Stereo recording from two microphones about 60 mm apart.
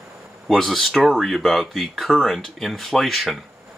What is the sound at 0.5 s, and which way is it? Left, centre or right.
Speech, centre.